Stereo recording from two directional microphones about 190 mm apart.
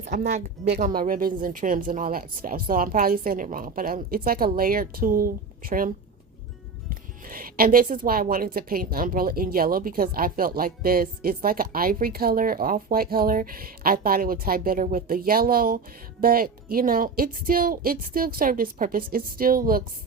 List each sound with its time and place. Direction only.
0.0 s speech: 40° right (ahead or behind)
7.3 s speech: 50° right (ahead or behind)